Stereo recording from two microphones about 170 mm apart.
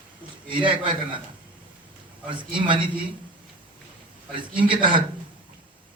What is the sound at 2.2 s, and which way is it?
Speech, 30° right (ahead or behind).